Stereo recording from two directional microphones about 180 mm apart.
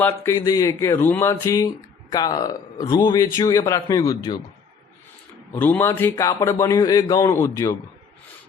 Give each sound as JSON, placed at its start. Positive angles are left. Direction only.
{"t": 0.0, "sound": "a man's voice", "side_deg": 15}
{"t": 5.5, "sound": "a man's voice", "side_deg": 10}